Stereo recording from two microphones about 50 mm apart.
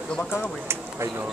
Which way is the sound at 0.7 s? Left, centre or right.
Right.